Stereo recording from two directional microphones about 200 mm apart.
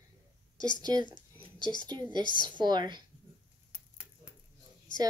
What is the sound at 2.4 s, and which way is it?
Speech, 20° right (ahead or behind).